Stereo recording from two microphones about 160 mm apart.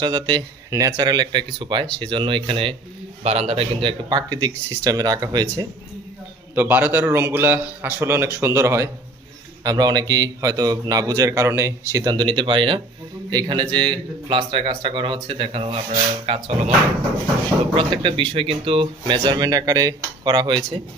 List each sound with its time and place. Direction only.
0.0 s speech: 25° right (ahead or behind)
6.5 s a man's voice: 10° right (ahead or behind); by 16.7 s 40° right (ahead or behind)
17.7 s speech: 30° right (ahead or behind)